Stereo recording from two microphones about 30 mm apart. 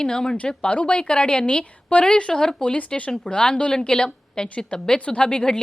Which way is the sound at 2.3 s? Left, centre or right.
Left.